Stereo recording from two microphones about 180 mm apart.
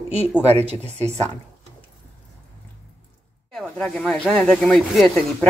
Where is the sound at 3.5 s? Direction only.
Centre (ahead or behind).